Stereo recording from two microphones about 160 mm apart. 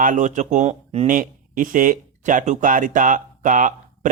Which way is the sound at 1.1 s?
60° right (ahead or behind).